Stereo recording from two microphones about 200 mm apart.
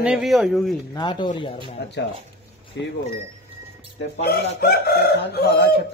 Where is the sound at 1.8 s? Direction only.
55° left (ahead or behind).